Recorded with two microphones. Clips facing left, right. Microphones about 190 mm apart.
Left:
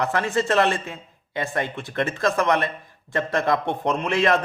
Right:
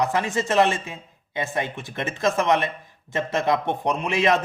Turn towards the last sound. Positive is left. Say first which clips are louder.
# left 1 dB
turn(degrees=-15)  # may be behind; listen again after turning